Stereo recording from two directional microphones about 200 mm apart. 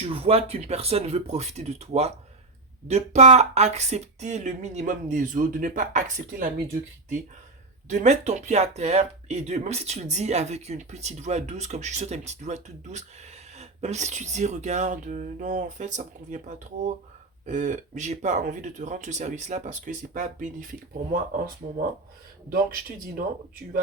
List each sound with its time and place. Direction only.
0.0 s speech: 30° right (ahead or behind)
7.9 s speech: 35° right (ahead or behind)
22.4 s speech: 45° right (ahead or behind)